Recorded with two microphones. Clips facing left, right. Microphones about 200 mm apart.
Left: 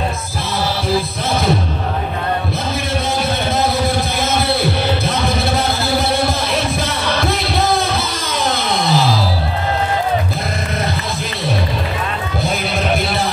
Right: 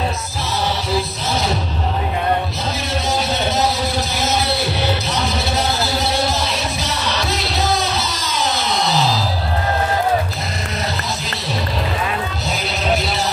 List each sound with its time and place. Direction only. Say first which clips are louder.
7.1 s music: left 4 dB; 55° left (ahead or behind)